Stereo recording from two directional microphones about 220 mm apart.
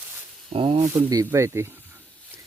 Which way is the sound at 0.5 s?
25° right (ahead or behind).